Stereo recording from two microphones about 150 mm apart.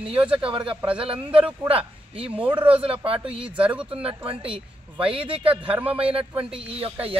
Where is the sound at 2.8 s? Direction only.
40° right (ahead or behind).